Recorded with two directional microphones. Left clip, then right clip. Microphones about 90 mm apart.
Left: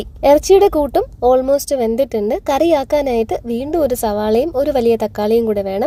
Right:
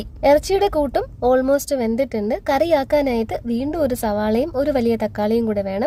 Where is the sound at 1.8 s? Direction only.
30° left (ahead or behind).